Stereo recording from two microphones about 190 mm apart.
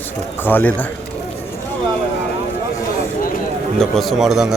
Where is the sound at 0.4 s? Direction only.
10° left (ahead or behind).